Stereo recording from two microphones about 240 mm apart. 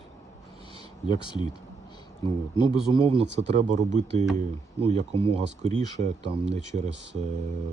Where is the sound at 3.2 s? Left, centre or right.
Right.